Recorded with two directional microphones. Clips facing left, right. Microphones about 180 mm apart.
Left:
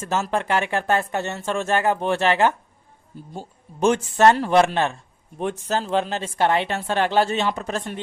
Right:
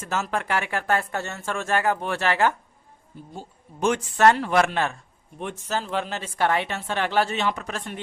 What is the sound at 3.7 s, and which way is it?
Speech, 30° left (ahead or behind).